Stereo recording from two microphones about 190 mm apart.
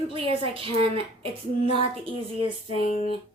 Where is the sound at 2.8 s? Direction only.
40° left (ahead or behind).